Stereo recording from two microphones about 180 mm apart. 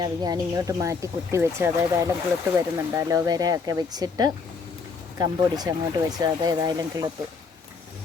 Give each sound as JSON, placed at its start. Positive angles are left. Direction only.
{"t": 0.0, "sound": "speech", "side_deg": -20}